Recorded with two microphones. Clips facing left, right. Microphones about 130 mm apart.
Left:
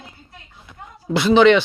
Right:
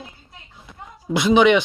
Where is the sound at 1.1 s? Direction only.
15° right (ahead or behind).